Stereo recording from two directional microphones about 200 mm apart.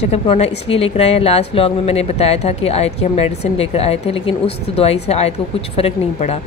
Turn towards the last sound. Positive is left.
turn(degrees=30)  # may be behind; listen again after turning